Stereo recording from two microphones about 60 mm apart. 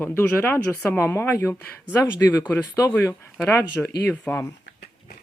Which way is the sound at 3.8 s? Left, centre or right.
Left.